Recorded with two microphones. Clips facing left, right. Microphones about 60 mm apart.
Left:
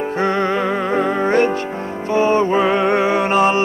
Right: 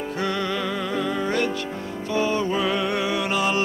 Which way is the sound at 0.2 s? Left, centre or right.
Left.